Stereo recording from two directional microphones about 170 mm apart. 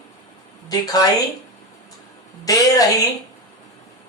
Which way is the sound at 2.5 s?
20° left (ahead or behind).